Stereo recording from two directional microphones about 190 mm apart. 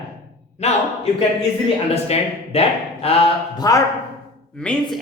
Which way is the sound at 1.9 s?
35° left (ahead or behind).